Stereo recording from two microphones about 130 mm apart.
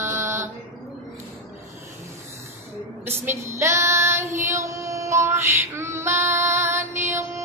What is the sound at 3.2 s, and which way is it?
Female singing, 20° right (ahead or behind).